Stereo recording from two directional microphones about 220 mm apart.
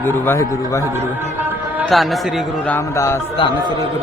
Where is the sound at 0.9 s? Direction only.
10° right (ahead or behind).